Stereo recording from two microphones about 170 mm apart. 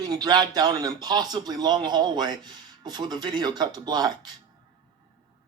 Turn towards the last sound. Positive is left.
turn(degrees=-25)  # may be behind; listen again after turning